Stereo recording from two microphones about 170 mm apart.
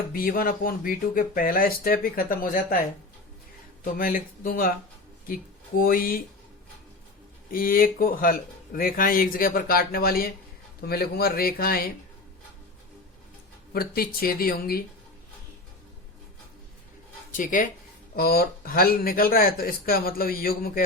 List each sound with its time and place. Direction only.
0.1 s speech: 60° left (ahead or behind)
3.9 s speech: 55° left (ahead or behind)
7.5 s speech: 55° left (ahead or behind)
13.7 s speech: 60° left (ahead or behind)
17.3 s speech: 50° left (ahead or behind)
18.2 s speech: 60° left (ahead or behind)